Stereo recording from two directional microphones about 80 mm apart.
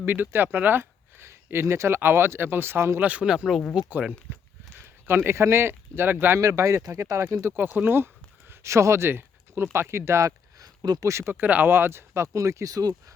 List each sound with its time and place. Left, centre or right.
0.0 s speech: right
3.0 s speech: centre
3.8 s speech: right
5.0 s speech: right
6.4 s speech: right
7.5 s speech: right
10.8 s speech: right
11.1 s speech: right